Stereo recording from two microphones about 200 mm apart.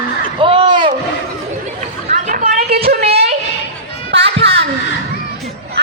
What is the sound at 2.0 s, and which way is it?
Chatter, 35° right (ahead or behind).